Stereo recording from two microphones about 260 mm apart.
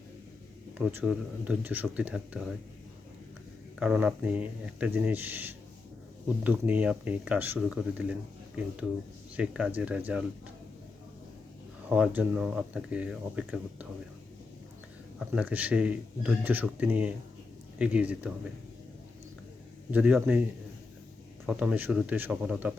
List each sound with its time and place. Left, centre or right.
0.8 s speech: centre
3.8 s speech: centre
11.9 s speech: centre
15.2 s speech: centre
19.9 s speech: centre
21.4 s speech: centre